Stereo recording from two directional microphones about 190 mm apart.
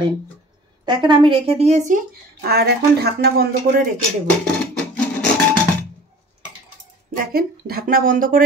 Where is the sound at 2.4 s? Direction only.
55° right (ahead or behind).